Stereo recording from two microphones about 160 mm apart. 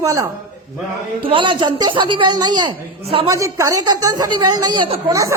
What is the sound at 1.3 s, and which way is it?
A woman's voice, 30° right (ahead or behind).